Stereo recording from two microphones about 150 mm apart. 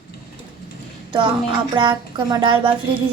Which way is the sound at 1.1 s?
30° right (ahead or behind).